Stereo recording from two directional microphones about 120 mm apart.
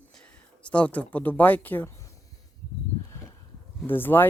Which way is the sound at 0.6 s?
10° left (ahead or behind).